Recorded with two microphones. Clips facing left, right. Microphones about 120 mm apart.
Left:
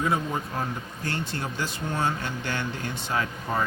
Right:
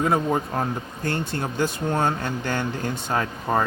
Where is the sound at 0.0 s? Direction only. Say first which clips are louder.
Right 5 dB; 50° right (ahead or behind).